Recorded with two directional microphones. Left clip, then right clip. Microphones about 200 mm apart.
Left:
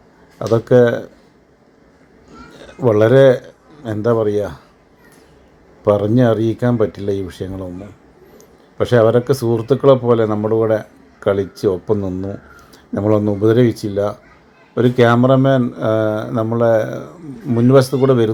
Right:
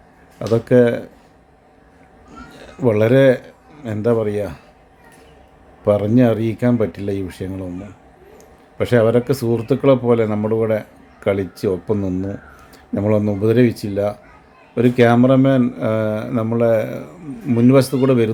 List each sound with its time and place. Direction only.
0.3 s speech: centre (ahead or behind)
2.6 s a man's voice: centre (ahead or behind)
5.8 s speech: 5° left (ahead or behind)
8.8 s speech: 5° left (ahead or behind)